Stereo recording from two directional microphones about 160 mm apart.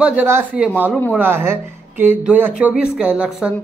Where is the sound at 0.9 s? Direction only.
5° left (ahead or behind).